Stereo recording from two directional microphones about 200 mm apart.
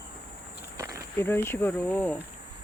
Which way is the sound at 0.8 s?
15° right (ahead or behind).